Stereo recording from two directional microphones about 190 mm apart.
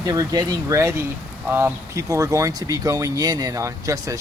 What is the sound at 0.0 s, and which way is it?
Speech, 20° right (ahead or behind).